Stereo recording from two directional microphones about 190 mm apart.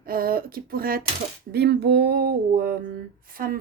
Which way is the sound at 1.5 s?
60° right (ahead or behind).